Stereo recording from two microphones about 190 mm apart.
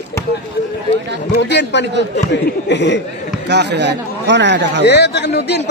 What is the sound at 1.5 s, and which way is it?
A man's voice, 65° left (ahead or behind).